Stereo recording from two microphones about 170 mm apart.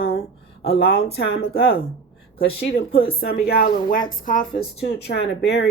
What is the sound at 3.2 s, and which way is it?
A woman's voice, 65° left (ahead or behind).